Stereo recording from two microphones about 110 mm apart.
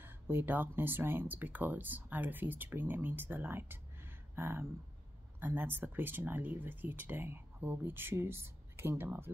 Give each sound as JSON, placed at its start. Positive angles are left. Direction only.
{"t": 0.0, "sound": "speech", "side_deg": -20}